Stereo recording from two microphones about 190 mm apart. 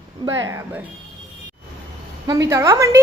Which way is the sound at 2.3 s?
15° right (ahead or behind).